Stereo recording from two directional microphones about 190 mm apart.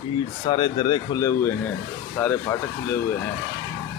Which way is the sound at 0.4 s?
25° left (ahead or behind).